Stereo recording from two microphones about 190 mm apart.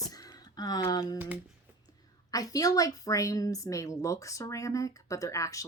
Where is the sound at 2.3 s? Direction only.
20° left (ahead or behind).